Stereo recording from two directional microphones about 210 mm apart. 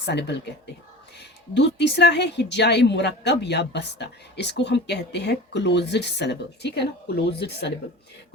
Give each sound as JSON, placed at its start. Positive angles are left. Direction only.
{"t": 0.0, "sound": "a woman's voice", "side_deg": 55}